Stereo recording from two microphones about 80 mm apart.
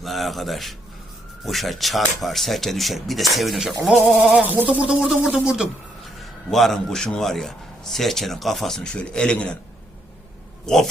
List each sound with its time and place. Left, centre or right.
0.0 s a man's voice: centre
4.0 s speech: centre
6.5 s a man's voice: centre
10.7 s speech: centre